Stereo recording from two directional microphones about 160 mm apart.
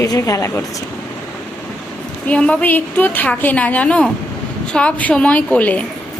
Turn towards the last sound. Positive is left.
turn(degrees=10)  # may be behind; listen again after turning